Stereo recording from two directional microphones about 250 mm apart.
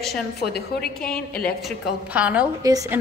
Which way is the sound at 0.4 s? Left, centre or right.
Left.